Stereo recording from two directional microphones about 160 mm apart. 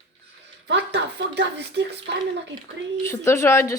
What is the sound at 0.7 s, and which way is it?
Speech, 90° right.